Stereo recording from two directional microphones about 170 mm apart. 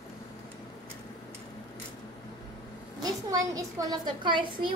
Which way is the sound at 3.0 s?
20° right (ahead or behind).